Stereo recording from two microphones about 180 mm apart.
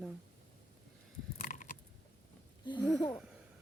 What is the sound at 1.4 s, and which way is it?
Biting, 45° left (ahead or behind).